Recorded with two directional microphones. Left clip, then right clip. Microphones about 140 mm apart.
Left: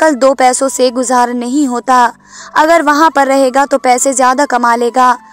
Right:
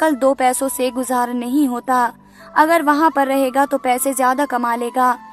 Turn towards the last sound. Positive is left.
turn(degrees=40)  # may be behind; listen again after turning